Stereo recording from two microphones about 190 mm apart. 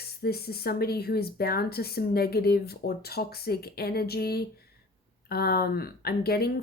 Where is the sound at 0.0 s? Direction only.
55° left (ahead or behind).